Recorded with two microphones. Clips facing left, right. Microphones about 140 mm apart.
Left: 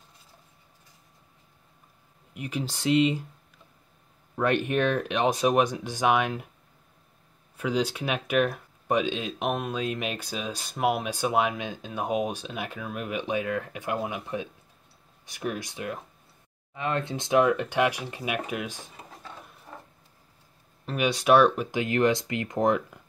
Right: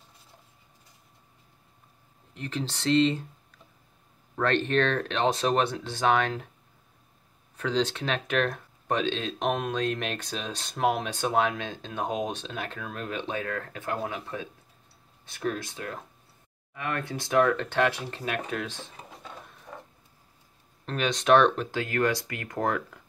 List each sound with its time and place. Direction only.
2.3 s speech: 10° left (ahead or behind)
4.4 s speech: 10° left (ahead or behind)
7.5 s speech: 10° left (ahead or behind)
20.8 s speech: 10° left (ahead or behind)